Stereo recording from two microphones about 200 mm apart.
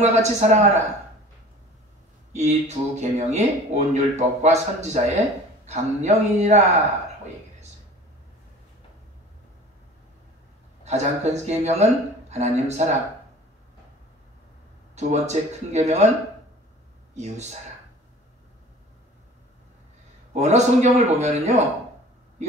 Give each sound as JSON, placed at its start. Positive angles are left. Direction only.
{"t": 0.0, "sound": "speech", "side_deg": -35}
{"t": 2.3, "sound": "speech", "side_deg": -35}
{"t": 10.8, "sound": "speech", "side_deg": -35}
{"t": 15.0, "sound": "speech", "side_deg": -35}
{"t": 17.1, "sound": "speech", "side_deg": -35}
{"t": 20.3, "sound": "speech", "side_deg": -35}